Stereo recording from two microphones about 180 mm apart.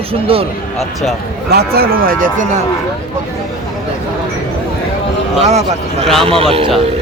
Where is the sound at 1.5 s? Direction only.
60° right (ahead or behind).